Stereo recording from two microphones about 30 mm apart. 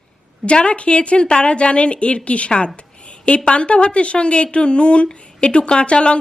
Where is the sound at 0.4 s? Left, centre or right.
Left.